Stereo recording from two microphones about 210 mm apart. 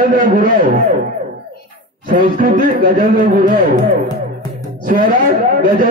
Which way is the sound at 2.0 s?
40° right (ahead or behind).